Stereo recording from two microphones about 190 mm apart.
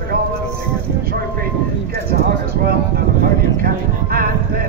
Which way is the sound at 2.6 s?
50° right (ahead or behind).